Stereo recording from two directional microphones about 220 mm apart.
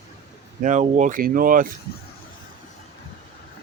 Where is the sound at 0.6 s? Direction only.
35° right (ahead or behind).